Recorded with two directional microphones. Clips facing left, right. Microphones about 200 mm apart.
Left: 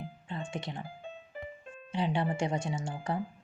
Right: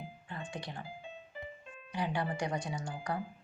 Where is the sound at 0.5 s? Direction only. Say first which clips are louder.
Left 4 dB; 25° left (ahead or behind).